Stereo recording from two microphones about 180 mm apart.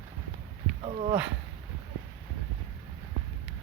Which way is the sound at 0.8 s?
35° right (ahead or behind).